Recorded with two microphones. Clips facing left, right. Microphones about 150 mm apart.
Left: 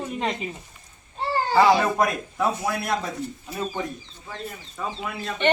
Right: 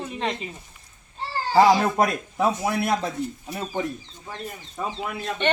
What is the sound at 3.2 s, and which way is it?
Speech, 75° right (ahead or behind).